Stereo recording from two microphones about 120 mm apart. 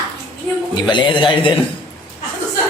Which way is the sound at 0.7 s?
40° left (ahead or behind).